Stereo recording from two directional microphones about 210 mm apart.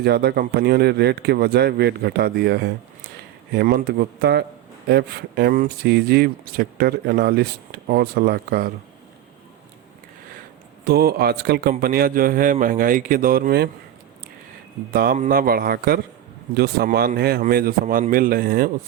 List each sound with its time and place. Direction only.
0.0 s speech: 50° right (ahead or behind)
10.8 s speech: 50° right (ahead or behind)
14.9 s speech: 40° right (ahead or behind)